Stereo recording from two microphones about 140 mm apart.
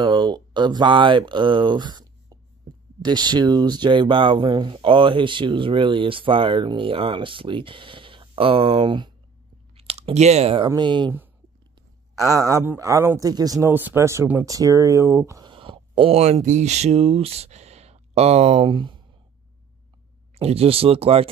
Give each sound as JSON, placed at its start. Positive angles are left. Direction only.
{"t": 0.0, "sound": "speech", "side_deg": -30}
{"t": 9.8, "sound": "speech", "side_deg": -45}
{"t": 12.4, "sound": "speech", "side_deg": -20}
{"t": 15.4, "sound": "speech", "side_deg": -40}
{"t": 20.3, "sound": "speech", "side_deg": -45}